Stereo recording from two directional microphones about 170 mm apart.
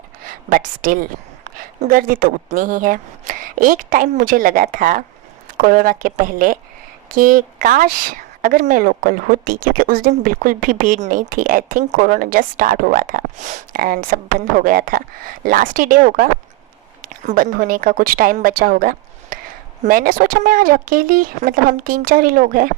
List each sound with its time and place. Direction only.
0.3 s a woman's voice: 55° right (ahead or behind)